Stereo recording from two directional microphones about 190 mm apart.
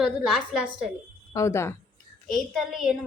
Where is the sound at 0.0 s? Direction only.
5° right (ahead or behind).